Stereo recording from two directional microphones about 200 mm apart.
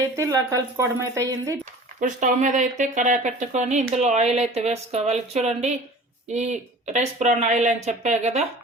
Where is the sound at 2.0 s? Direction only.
40° right (ahead or behind).